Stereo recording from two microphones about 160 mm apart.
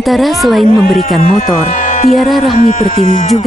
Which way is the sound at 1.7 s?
55° left (ahead or behind).